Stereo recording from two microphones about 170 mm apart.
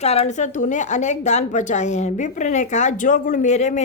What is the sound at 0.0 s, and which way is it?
A woman's voice, 40° left (ahead or behind).